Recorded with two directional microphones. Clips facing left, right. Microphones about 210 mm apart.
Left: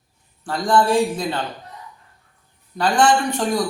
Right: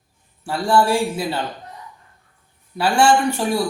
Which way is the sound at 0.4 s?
10° right (ahead or behind).